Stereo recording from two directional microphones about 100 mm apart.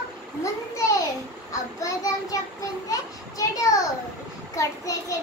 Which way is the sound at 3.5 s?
35° left (ahead or behind).